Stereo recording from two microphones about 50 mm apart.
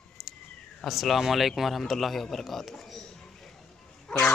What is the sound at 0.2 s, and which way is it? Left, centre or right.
Cat, centre.